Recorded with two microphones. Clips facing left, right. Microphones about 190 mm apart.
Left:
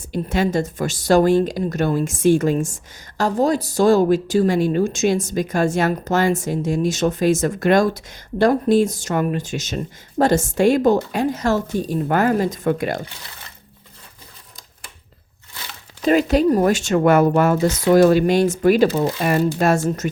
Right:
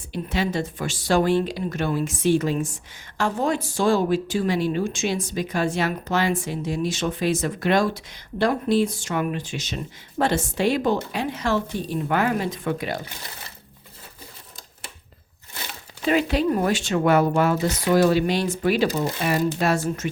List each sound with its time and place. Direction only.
0.1 s speech: 45° left (ahead or behind)
16.0 s speech: 40° left (ahead or behind)